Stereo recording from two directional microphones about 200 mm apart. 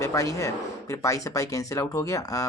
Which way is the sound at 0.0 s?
15° left (ahead or behind).